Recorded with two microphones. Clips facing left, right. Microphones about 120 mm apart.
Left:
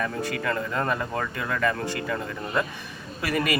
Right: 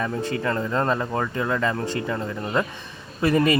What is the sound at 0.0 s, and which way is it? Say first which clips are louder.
Speech: right 3 dB; 20° right (ahead or behind).